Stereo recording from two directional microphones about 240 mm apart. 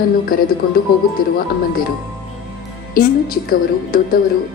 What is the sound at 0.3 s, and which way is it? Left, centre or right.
Speech, left.